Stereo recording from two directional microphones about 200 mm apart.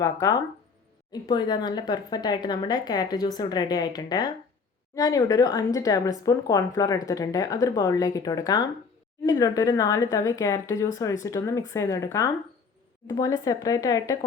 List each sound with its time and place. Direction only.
0.0 s speech: 15° left (ahead or behind)